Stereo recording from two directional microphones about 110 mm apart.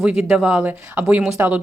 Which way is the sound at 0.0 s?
10° right (ahead or behind).